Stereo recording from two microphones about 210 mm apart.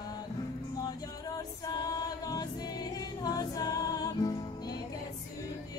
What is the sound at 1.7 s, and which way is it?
Choir, 20° left (ahead or behind).